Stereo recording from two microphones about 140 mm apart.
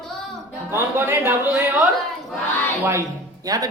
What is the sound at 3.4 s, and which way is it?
Speech, 25° right (ahead or behind).